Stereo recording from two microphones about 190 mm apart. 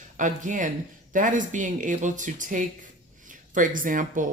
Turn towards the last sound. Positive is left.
turn(degrees=-45)  # may be behind; listen again after turning